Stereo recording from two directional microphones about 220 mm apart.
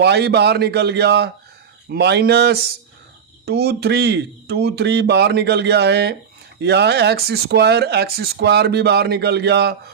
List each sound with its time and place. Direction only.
0.0 s speech: 50° right (ahead or behind)